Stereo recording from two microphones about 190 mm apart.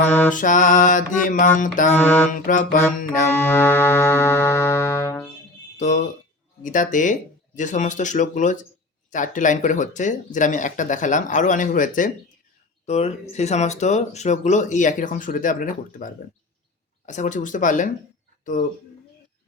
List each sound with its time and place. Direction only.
0.3 s music: 45° left (ahead or behind)
2.0 s mantra: 10° left (ahead or behind)
2.3 s music: 45° left (ahead or behind)
3.4 s music: 10° left (ahead or behind)
5.7 s music: 40° left (ahead or behind)
6.6 s speech: 45° left (ahead or behind)
17.1 s music: 40° left (ahead or behind)